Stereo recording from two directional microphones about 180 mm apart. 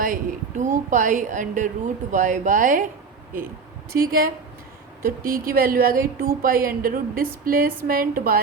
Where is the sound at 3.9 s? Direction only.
55° right (ahead or behind).